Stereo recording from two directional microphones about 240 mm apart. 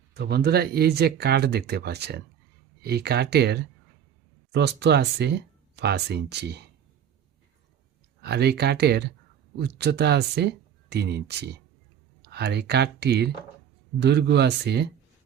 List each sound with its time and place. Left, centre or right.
0.1 s speech: right
8.2 s speech: right